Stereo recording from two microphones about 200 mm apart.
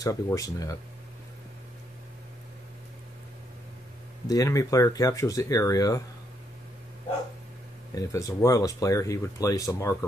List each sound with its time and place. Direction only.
0.0 s speech: 15° left (ahead or behind)
4.3 s speech: 15° left (ahead or behind)
7.9 s speech: 15° left (ahead or behind)